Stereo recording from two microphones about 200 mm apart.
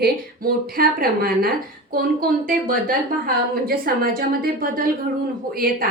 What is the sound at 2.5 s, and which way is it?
A woman's voice, 45° right (ahead or behind).